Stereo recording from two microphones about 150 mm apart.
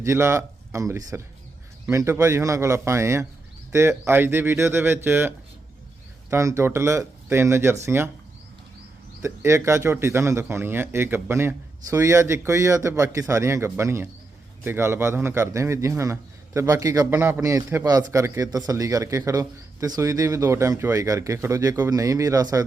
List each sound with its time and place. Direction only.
0.0 s a man's voice: 20° right (ahead or behind)
6.3 s a man's voice: 20° right (ahead or behind)
9.2 s a man's voice: 20° right (ahead or behind)